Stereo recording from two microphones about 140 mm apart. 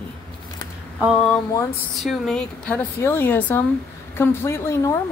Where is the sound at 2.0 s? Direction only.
5° left (ahead or behind).